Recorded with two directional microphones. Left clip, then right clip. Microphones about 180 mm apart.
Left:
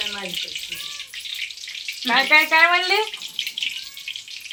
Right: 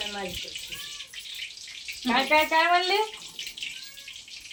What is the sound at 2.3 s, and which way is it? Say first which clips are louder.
Speech: left 6 dB; 10° left (ahead or behind).